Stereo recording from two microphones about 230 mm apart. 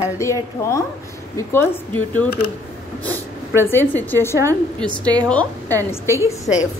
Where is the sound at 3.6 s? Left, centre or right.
Centre.